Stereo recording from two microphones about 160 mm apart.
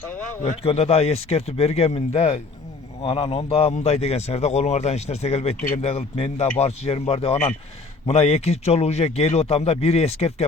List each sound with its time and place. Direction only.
0.4 s speech: 40° left (ahead or behind)